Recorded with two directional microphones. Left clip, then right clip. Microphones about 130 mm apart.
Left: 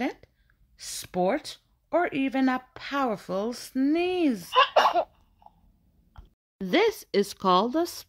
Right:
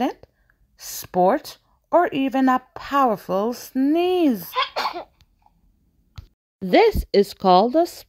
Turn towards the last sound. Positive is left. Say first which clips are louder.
# right 8 dB
turn(degrees=-25)  # may be behind; listen again after turning